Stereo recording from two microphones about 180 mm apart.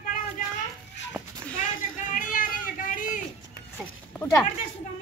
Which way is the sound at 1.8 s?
50° left (ahead or behind).